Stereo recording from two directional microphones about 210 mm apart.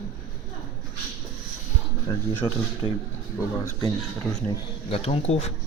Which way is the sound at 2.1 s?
20° left (ahead or behind).